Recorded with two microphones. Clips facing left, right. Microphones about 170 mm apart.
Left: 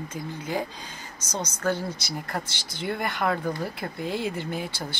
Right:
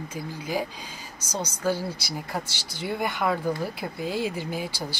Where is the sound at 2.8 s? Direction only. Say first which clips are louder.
Even; 5° right (ahead or behind).